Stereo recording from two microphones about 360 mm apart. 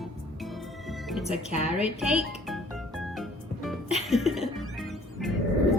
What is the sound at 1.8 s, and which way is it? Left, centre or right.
Music, centre.